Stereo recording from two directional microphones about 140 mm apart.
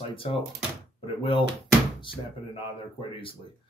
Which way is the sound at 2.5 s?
40° left (ahead or behind).